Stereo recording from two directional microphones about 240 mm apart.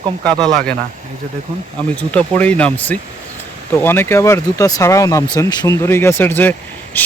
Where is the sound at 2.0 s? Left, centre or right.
Centre.